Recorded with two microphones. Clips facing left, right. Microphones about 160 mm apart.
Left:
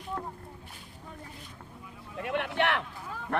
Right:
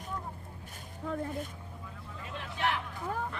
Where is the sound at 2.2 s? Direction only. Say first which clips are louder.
Left 5 dB; 70° left (ahead or behind).